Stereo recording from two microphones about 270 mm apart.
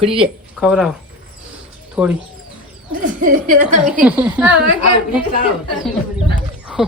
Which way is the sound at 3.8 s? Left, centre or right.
Centre.